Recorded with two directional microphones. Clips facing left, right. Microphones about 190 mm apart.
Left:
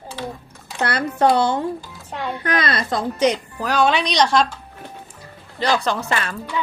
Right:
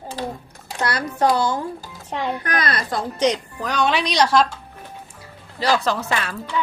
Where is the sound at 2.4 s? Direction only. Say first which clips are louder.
Left 2 dB; 25° left (ahead or behind).